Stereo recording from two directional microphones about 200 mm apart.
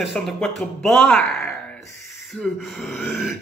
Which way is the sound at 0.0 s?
Centre (ahead or behind).